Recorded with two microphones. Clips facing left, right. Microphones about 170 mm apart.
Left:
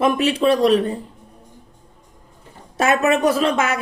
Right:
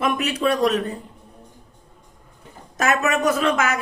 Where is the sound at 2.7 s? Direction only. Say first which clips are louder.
Left 4 dB; 30° left (ahead or behind).